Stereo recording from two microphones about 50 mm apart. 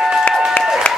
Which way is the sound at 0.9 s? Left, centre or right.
Left.